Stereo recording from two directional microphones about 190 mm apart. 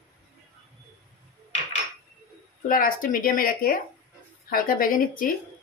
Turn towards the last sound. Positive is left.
turn(degrees=45)  # may be behind; listen again after turning